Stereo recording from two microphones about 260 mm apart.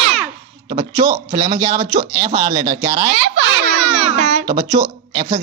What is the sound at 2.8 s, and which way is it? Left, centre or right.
Speech, centre.